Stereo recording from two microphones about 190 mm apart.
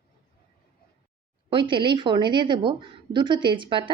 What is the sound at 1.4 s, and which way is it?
A woman's voice, 25° right (ahead or behind).